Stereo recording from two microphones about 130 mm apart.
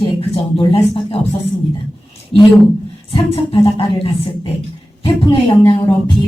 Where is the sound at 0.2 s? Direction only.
45° left (ahead or behind).